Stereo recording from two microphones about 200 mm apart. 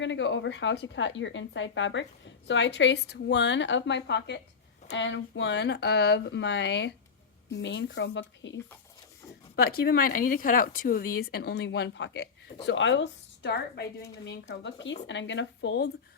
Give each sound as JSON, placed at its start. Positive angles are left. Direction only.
{"t": 0.0, "sound": "a woman's voice", "side_deg": 65}
{"t": 9.6, "sound": "a woman's voice", "side_deg": 50}